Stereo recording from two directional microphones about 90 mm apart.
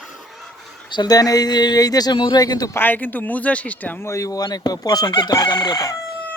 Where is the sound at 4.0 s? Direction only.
35° left (ahead or behind).